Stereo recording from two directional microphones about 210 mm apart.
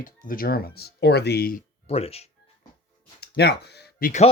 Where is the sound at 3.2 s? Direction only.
50° left (ahead or behind).